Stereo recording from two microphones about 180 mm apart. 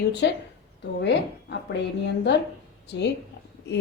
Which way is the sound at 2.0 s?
75° left (ahead or behind).